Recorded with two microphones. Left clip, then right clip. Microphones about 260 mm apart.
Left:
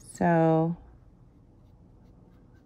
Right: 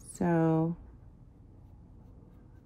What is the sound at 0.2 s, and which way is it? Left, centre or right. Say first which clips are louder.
Speech: left 6 dB; left.